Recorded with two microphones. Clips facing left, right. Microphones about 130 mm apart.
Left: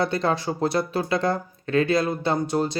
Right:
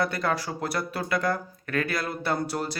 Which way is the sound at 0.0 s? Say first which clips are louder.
Left 4 dB; 25° left (ahead or behind).